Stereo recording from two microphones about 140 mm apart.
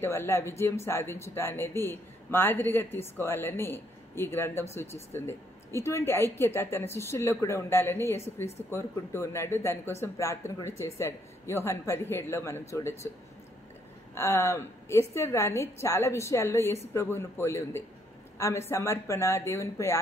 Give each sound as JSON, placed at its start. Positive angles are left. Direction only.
{"t": 0.0, "sound": "a man's voice", "side_deg": 15}
{"t": 14.1, "sound": "a woman's voice", "side_deg": 20}